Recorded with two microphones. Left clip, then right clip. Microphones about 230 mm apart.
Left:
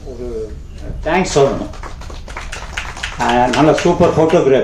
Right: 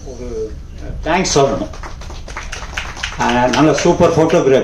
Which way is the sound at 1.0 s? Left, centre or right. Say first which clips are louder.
Even; right.